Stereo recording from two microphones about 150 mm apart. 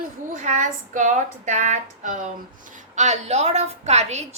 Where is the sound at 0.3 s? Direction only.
55° right (ahead or behind).